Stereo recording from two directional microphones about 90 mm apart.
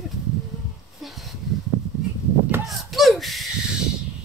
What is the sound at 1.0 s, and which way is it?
Speech, centre (ahead or behind).